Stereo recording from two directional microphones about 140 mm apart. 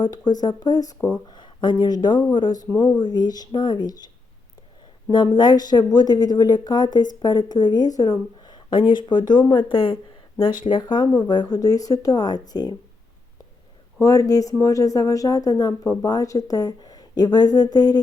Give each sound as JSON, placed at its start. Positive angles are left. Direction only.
{"t": 0.0, "sound": "speech", "side_deg": 30}
{"t": 5.1, "sound": "speech", "side_deg": 35}
{"t": 14.0, "sound": "speech", "side_deg": 25}